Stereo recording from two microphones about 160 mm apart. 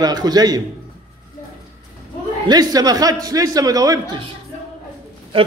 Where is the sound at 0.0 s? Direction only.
25° right (ahead or behind).